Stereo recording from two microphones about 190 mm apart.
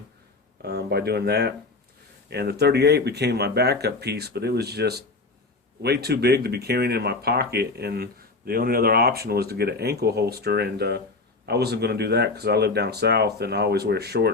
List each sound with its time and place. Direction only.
0.6 s speech: 60° right (ahead or behind)